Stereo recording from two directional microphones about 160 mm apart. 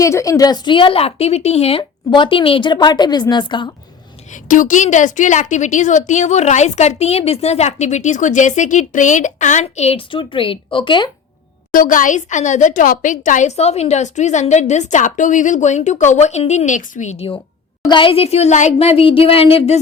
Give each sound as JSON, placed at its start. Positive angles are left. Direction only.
{"t": 0.0, "sound": "a woman's voice", "side_deg": 20}
{"t": 4.3, "sound": "a woman's voice", "side_deg": 55}
{"t": 11.7, "sound": "a woman's voice", "side_deg": 60}